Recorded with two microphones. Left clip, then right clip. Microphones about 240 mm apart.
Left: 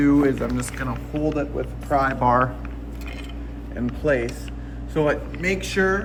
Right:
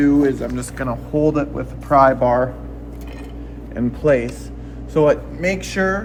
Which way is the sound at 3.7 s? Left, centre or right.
Centre.